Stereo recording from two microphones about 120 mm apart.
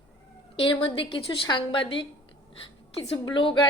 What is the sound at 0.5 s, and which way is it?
A woman's voice, 45° left (ahead or behind).